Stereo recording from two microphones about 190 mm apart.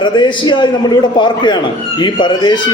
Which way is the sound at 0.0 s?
25° left (ahead or behind).